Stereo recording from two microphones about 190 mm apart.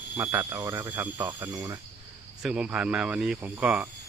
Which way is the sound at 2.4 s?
5° right (ahead or behind).